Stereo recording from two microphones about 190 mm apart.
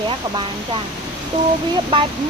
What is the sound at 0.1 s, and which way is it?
Speech, 25° right (ahead or behind).